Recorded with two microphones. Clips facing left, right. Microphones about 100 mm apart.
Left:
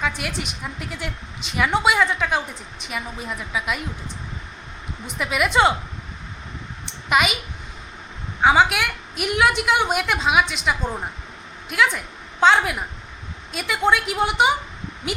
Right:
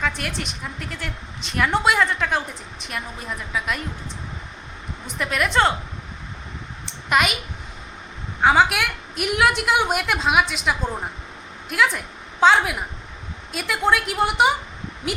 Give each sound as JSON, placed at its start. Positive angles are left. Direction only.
{"t": 0.0, "sound": "a woman's voice", "side_deg": 5}
{"t": 5.0, "sound": "a woman's voice", "side_deg": 5}
{"t": 7.1, "sound": "a woman's voice", "side_deg": 0}
{"t": 8.4, "sound": "a woman's voice", "side_deg": 0}